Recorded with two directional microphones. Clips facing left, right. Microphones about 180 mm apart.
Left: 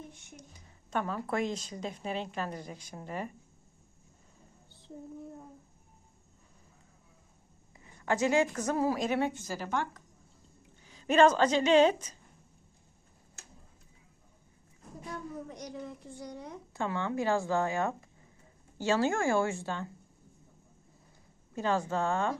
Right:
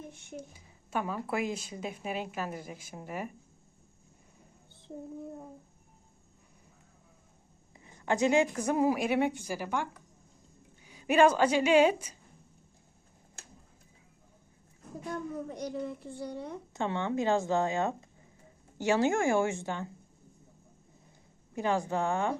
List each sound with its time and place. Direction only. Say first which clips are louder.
0.5 s speech: left 1 dB; 5° right (ahead or behind)
7.9 s a woman's voice: right 1 dB; 20° right (ahead or behind)
15.4 s speech: right 6 dB; 35° right (ahead or behind)
21.5 s speech: right 1 dB; 15° right (ahead or behind)